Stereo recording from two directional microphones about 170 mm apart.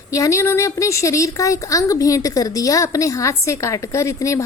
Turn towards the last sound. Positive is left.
turn(degrees=20)  # may be behind; listen again after turning